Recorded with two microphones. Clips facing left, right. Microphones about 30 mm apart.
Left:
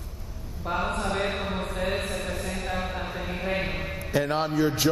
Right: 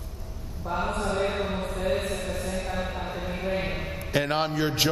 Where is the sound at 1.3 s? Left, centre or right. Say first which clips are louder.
Right 1 dB; centre.